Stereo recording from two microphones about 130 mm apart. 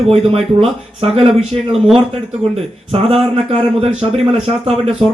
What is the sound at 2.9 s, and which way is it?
A man's voice, 50° right (ahead or behind).